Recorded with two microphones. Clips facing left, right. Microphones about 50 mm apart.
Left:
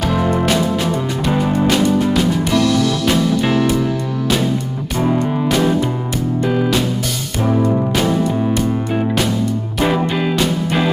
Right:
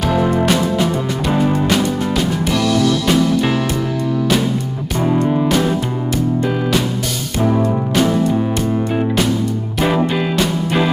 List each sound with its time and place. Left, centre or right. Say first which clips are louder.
0.0 s music: right 1 dB; centre
4.9 s music: right 1 dB; centre
9.8 s music: even; centre